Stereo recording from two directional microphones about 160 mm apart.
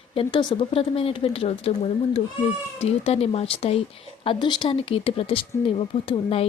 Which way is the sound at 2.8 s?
40° left (ahead or behind).